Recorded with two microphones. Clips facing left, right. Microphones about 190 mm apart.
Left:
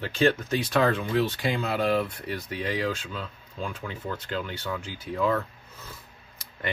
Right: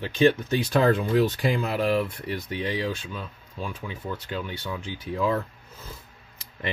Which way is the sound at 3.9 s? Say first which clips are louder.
Even; 15° right (ahead or behind).